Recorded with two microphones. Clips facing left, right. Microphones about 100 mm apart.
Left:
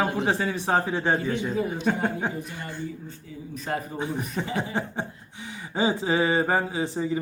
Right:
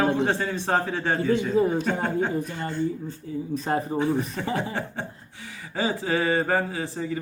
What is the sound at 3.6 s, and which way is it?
Speech, 30° right (ahead or behind).